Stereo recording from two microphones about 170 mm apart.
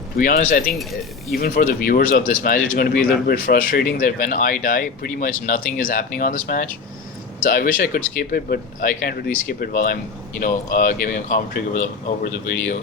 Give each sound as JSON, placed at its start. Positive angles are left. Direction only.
{"t": 0.2, "sound": "speech", "side_deg": 55}
{"t": 0.8, "sound": "speech", "side_deg": 0}
{"t": 1.4, "sound": "speech", "side_deg": 50}